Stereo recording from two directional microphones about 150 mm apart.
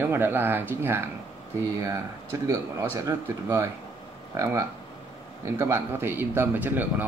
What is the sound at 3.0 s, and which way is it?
Speech, 20° right (ahead or behind).